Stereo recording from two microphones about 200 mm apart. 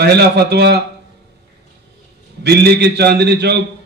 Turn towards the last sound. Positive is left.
turn(degrees=-55)  # may be behind; listen again after turning